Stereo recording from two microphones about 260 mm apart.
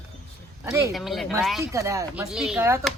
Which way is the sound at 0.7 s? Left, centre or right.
Centre.